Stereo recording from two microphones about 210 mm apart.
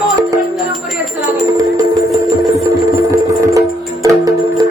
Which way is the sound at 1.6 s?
15° right (ahead or behind).